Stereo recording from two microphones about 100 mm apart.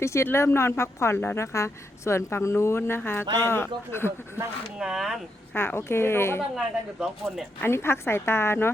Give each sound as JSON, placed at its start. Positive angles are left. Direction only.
{"t": 0.0, "sound": "a woman's voice", "side_deg": 30}
{"t": 4.8, "sound": "speech", "side_deg": -5}
{"t": 5.5, "sound": "a woman's voice", "side_deg": 25}
{"t": 6.4, "sound": "speech", "side_deg": -5}
{"t": 7.6, "sound": "a woman's voice", "side_deg": 25}